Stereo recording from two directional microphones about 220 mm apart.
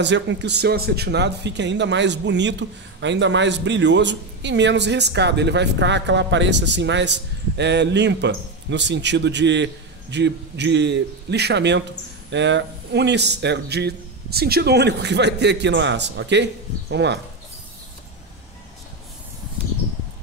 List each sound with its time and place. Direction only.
0.0 s a man's voice: 55° right (ahead or behind)